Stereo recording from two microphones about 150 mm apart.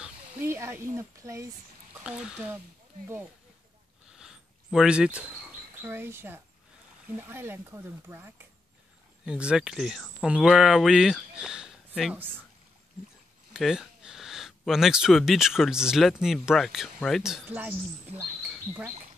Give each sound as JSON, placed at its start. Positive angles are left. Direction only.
{"t": 0.0, "sound": "speech", "side_deg": -15}
{"t": 2.0, "sound": "speech", "side_deg": -5}
{"t": 4.1, "sound": "a sound", "side_deg": -5}
{"t": 5.8, "sound": "speech", "side_deg": -15}
{"t": 13.5, "sound": "speech", "side_deg": 0}